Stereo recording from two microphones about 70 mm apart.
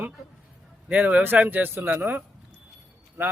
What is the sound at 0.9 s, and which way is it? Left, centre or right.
Speech, right.